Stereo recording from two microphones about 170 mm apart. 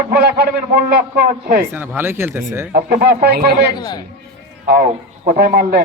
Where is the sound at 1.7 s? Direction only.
10° right (ahead or behind).